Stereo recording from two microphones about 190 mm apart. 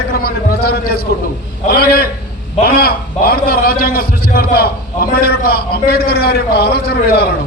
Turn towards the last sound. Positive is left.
turn(degrees=55)  # may be behind; listen again after turning